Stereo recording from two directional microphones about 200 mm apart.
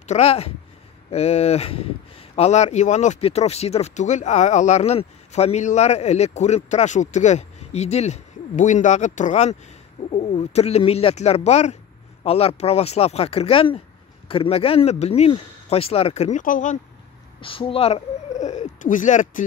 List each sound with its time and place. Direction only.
0.0 s speech: 35° left (ahead or behind)
17.4 s speech: 25° left (ahead or behind)